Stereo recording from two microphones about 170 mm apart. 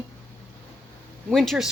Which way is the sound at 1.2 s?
Centre (ahead or behind).